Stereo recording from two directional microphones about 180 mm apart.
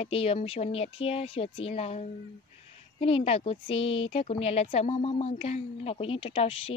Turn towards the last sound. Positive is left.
turn(degrees=30)  # may be behind; listen again after turning